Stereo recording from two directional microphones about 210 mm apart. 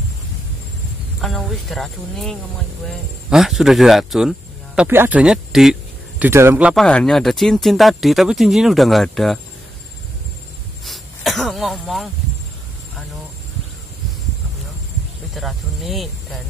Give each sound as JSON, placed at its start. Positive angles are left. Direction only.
{"t": 1.2, "sound": "speech", "side_deg": 0}
{"t": 6.7, "sound": "speech", "side_deg": 5}
{"t": 10.9, "sound": "a sound", "side_deg": 0}
{"t": 15.3, "sound": "speech", "side_deg": 0}